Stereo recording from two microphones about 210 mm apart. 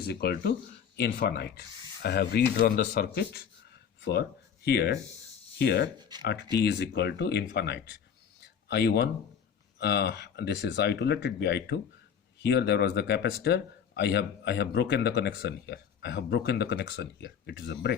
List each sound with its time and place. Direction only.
0.0 s speech: 50° left (ahead or behind)
6.0 s speech: 20° right (ahead or behind)
6.2 s speech: 50° left (ahead or behind)